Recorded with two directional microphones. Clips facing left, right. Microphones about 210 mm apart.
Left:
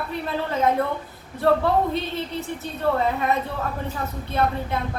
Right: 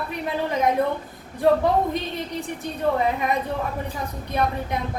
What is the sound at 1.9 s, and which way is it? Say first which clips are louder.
A woman's voice: left 1 dB; 15° right (ahead or behind).